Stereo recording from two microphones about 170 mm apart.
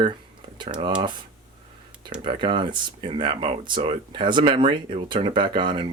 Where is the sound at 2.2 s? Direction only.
30° right (ahead or behind).